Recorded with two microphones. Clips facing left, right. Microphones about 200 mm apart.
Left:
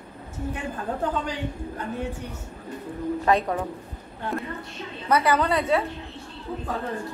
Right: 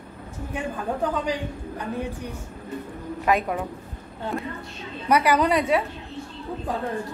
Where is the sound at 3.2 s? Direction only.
10° right (ahead or behind).